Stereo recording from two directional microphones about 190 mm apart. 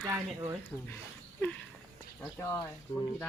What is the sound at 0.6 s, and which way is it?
Speech, 15° left (ahead or behind).